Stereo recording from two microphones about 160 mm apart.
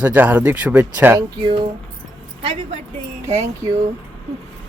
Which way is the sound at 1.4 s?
30° right (ahead or behind).